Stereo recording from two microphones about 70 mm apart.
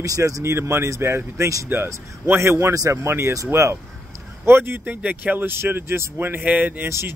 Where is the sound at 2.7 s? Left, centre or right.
Right.